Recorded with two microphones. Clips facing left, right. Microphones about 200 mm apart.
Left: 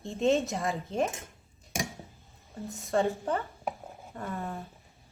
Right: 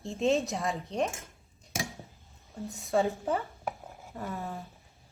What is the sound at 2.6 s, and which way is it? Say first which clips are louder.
Speech: even; centre (ahead or behind).